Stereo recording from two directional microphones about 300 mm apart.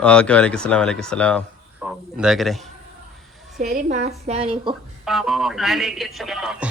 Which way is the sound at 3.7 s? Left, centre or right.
Right.